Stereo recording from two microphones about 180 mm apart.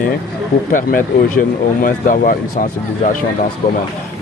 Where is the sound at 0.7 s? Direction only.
50° left (ahead or behind).